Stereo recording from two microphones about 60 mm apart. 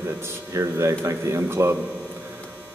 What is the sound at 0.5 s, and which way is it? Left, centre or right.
Speech, right.